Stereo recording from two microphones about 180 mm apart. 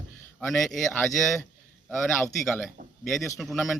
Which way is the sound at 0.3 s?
Centre (ahead or behind).